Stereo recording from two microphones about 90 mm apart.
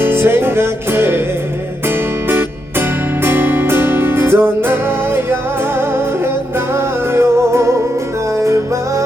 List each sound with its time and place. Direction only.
0.0 s music: 25° right (ahead or behind)
2.2 s music: 25° right (ahead or behind)